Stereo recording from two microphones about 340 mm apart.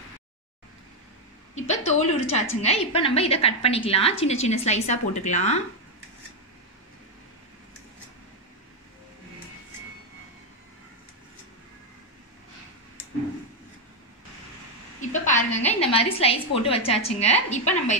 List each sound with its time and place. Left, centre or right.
2.0 s a woman's voice: centre
15.0 s a sound: left
15.7 s a woman's voice: centre